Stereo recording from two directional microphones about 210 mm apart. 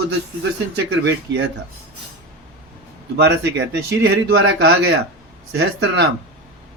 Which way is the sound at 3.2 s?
55° right (ahead or behind).